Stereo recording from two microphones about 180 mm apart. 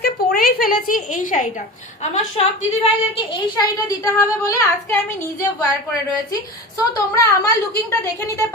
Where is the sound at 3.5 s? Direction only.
20° left (ahead or behind).